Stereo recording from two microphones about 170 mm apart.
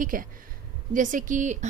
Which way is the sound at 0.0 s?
55° right (ahead or behind).